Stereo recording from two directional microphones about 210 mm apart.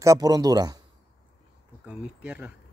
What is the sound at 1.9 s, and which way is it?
Speech, 5° right (ahead or behind).